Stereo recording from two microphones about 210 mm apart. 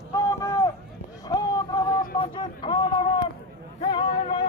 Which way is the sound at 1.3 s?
20° left (ahead or behind).